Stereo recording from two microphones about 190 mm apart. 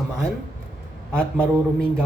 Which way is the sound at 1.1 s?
5° left (ahead or behind).